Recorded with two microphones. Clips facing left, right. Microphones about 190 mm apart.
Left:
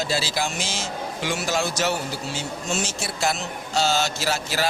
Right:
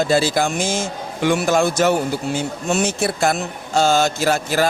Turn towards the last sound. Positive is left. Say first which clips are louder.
# right 7 dB
turn(degrees=-50)  # may be behind; listen again after turning